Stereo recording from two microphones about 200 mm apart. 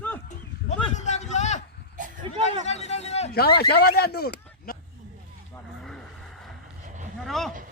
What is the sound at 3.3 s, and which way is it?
A man's voice, 50° left (ahead or behind).